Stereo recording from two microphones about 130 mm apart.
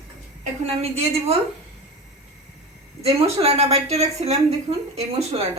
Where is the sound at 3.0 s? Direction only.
50° right (ahead or behind).